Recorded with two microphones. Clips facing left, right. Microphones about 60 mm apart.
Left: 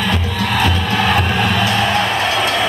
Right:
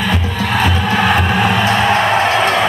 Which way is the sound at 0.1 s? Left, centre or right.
Centre.